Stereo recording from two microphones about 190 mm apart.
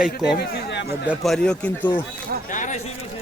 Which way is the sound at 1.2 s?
5° left (ahead or behind).